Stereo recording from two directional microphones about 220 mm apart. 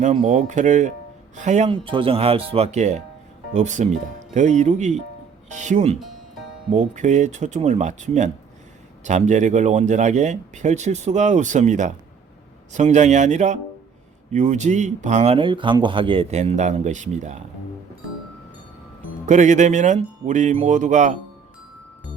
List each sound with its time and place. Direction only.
0.0 s speech: 35° right (ahead or behind)
19.2 s speech: 35° right (ahead or behind)